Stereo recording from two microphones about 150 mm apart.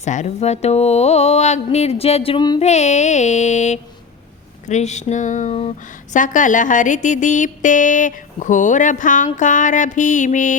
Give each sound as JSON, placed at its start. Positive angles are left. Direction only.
{"t": 0.0, "sound": "mantra", "side_deg": 50}
{"t": 2.6, "sound": "mantra", "side_deg": 50}
{"t": 6.1, "sound": "speech", "side_deg": 60}